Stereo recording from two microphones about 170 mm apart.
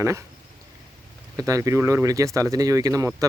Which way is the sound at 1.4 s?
20° right (ahead or behind).